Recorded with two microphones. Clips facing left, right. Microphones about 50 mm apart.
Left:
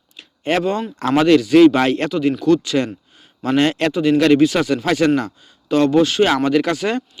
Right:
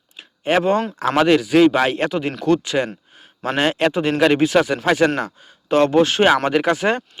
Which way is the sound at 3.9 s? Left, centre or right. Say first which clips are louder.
Left 3 dB; right.